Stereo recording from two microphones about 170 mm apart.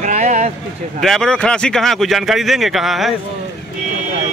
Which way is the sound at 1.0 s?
5° left (ahead or behind).